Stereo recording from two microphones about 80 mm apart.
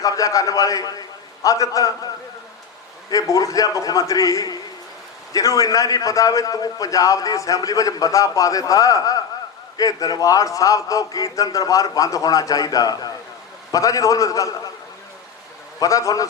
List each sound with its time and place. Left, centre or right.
0.0 s a man's voice: left
3.1 s a man's voice: left
15.8 s a man's voice: left